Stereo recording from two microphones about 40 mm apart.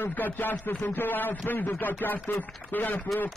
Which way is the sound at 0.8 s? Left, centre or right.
Left.